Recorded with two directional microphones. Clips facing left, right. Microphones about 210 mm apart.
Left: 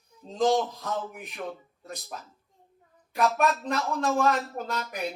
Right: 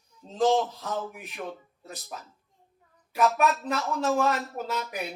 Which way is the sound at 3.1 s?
5° right (ahead or behind).